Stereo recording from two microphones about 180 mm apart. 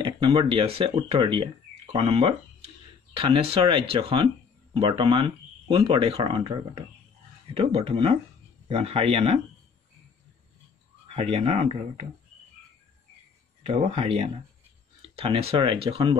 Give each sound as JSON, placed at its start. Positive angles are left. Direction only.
{"t": 0.0, "sound": "speech", "side_deg": -30}
{"t": 11.1, "sound": "speech", "side_deg": -35}
{"t": 13.6, "sound": "speech", "side_deg": -35}